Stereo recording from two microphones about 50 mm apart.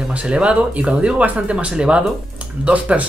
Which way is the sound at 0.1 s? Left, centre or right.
Right.